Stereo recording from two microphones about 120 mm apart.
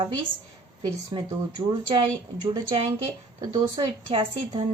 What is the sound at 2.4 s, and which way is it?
A woman's voice, 45° right (ahead or behind).